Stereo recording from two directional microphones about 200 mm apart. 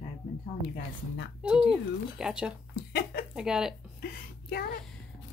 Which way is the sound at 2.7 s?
50° left (ahead or behind).